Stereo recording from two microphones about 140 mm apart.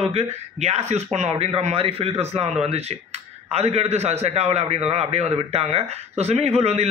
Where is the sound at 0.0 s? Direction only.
45° right (ahead or behind).